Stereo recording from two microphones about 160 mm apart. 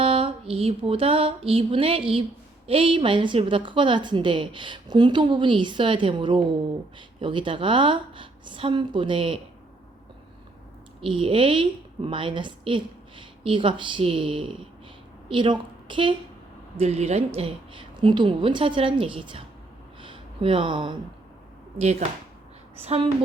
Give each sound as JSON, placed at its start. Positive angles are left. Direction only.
{"t": 0.0, "sound": "a sound", "side_deg": -35}
{"t": 2.6, "sound": "a woman's voice", "side_deg": -35}
{"t": 11.0, "sound": "a woman's voice", "side_deg": -35}
{"t": 16.7, "sound": "a woman's voice", "side_deg": -40}
{"t": 20.0, "sound": "a sound", "side_deg": -30}
{"t": 22.8, "sound": "a woman's voice", "side_deg": -40}